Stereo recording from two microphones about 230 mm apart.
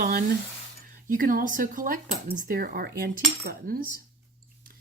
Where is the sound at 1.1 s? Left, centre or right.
Right.